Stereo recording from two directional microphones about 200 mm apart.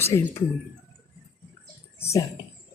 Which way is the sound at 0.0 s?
15° left (ahead or behind).